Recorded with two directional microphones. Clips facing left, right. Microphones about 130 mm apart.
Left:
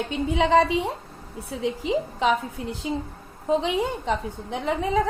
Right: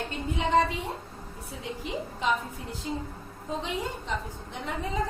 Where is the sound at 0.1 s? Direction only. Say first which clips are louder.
Left 6 dB; 85° left.